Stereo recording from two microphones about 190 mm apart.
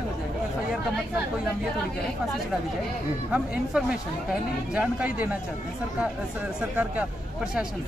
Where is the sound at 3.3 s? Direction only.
5° right (ahead or behind).